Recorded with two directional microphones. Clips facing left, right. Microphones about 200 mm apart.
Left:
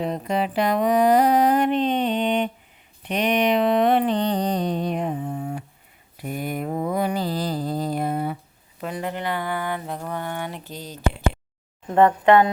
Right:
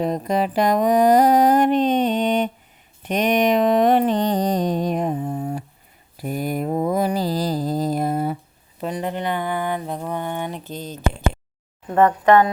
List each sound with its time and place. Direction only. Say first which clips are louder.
0.0 s mantra: right 3 dB; 40° right (ahead or behind)
3.0 s a sound: right 3 dB; 45° right (ahead or behind)
6.2 s mantra: right 4 dB; 40° right (ahead or behind)
8.8 s speech: right 3 dB; 25° right (ahead or behind)
11.9 s speech: right 1 dB; 20° left (ahead or behind)